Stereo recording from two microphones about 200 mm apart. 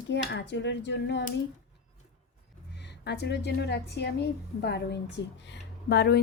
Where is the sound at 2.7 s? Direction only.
60° left (ahead or behind).